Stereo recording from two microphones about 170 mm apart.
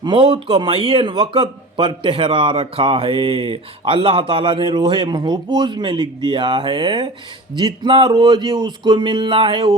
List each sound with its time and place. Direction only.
0.0 s a man's voice: 30° right (ahead or behind)